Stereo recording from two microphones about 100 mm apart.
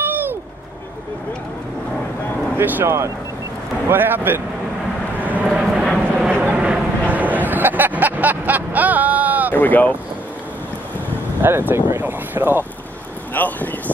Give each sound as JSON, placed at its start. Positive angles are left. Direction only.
{"t": 0.0, "sound": "vehicle", "side_deg": -20}
{"t": 2.5, "sound": "speech", "side_deg": -20}
{"t": 5.2, "sound": "vehicle", "side_deg": -15}
{"t": 5.6, "sound": "vehicle", "side_deg": 0}
{"t": 9.5, "sound": "speech", "side_deg": 15}
{"t": 11.4, "sound": "speech", "side_deg": -20}
{"t": 13.3, "sound": "a sound", "side_deg": 20}